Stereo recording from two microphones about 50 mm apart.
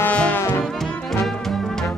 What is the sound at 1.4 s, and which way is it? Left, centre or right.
Music, centre.